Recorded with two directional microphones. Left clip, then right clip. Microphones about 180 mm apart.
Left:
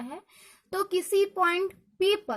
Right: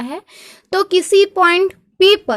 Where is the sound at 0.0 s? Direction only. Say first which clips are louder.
Right 13 dB; 40° right (ahead or behind).